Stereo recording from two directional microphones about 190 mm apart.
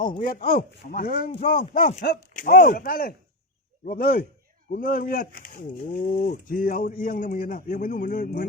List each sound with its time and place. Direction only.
0.2 s speech: 45° left (ahead or behind)